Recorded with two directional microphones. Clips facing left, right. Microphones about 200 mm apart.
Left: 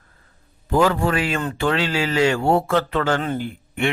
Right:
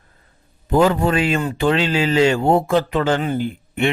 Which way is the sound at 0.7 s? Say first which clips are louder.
Right 3 dB; 20° right (ahead or behind).